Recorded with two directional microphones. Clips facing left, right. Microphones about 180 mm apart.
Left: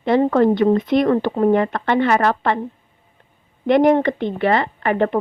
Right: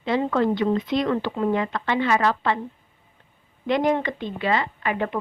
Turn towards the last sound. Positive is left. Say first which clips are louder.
# left 7 dB
turn(degrees=60)  # may be behind; listen again after turning